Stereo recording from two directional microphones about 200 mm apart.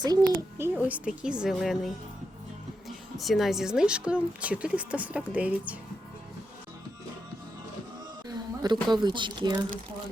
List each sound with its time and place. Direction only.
0.0 s a child's voice: 20° right (ahead or behind)
0.8 s speech: 5° right (ahead or behind)
3.2 s speech: centre (ahead or behind)
8.3 s speech: 20° right (ahead or behind)